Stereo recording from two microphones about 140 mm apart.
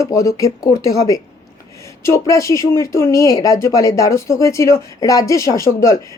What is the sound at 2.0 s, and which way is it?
Speech, 20° left (ahead or behind).